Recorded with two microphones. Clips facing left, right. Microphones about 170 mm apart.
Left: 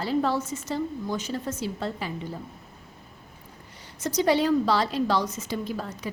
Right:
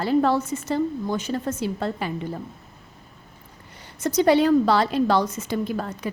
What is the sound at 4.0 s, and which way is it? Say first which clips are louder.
A woman's voice: right 5 dB; 55° right (ahead or behind).